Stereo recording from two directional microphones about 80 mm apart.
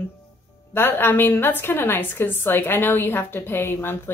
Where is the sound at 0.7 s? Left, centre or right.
Left.